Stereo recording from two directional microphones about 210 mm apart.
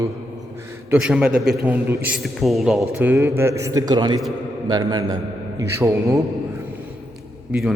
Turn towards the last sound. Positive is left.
turn(degrees=-5)  # may be behind; listen again after turning